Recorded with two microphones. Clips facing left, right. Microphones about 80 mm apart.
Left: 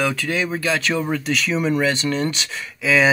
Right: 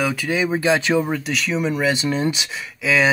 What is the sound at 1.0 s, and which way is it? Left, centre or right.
Speech, centre.